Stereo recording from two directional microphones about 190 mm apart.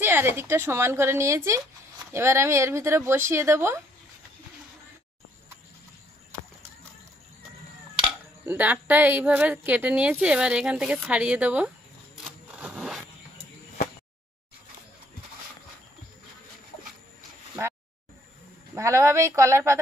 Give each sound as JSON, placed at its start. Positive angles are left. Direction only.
{"t": 0.0, "sound": "speech", "side_deg": -10}
{"t": 8.5, "sound": "a woman's voice", "side_deg": -10}
{"t": 12.5, "sound": "scrape", "side_deg": -5}
{"t": 18.8, "sound": "speech", "side_deg": -15}